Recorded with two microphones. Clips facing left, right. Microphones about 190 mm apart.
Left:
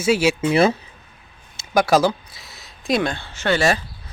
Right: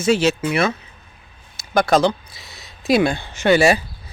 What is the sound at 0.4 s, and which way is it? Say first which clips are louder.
Speech: left 3 dB; 30° left (ahead or behind).